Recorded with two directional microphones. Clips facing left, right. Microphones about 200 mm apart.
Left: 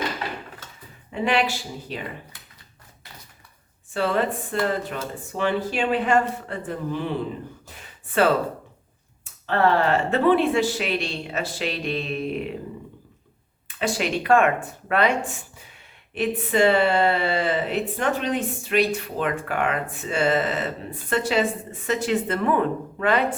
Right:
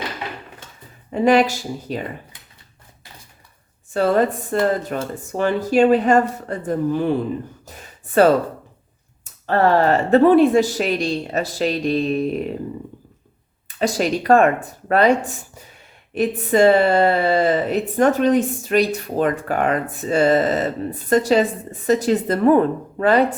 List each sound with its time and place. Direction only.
1.1 s speech: 40° right (ahead or behind)
3.9 s speech: 45° right (ahead or behind)
7.6 s a sound: 40° right (ahead or behind)
9.5 s speech: 40° right (ahead or behind)
13.7 s speech: 40° right (ahead or behind)